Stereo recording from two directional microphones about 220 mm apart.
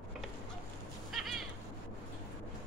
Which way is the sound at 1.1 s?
Centre (ahead or behind).